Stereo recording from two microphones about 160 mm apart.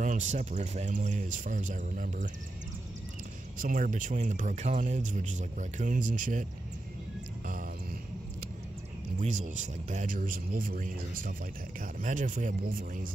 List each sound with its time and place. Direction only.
0.0 s speech: 50° right (ahead or behind)
3.6 s speech: 55° right (ahead or behind)
9.2 s a man's voice: 50° right (ahead or behind)